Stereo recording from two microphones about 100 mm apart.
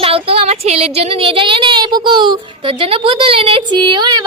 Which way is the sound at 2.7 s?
65° right (ahead or behind).